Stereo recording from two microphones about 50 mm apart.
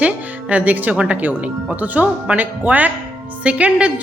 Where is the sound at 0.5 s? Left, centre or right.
Right.